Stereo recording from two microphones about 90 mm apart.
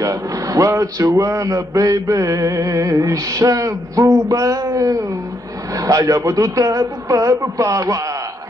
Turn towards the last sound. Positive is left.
turn(degrees=-35)  # may be behind; listen again after turning